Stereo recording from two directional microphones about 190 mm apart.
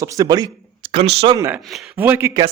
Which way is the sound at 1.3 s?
15° right (ahead or behind).